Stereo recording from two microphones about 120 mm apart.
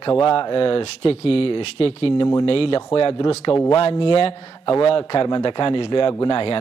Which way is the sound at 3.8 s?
45° left (ahead or behind).